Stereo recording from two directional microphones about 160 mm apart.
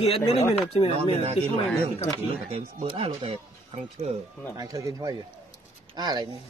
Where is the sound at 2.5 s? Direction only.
40° right (ahead or behind).